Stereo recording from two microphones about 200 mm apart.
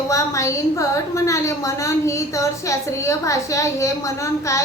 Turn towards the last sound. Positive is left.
turn(degrees=15)  # may be behind; listen again after turning